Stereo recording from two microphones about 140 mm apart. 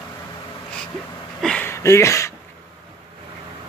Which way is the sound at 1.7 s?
20° left (ahead or behind).